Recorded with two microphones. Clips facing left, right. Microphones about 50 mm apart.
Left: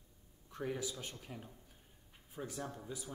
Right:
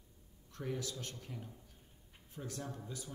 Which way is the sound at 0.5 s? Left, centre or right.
Centre.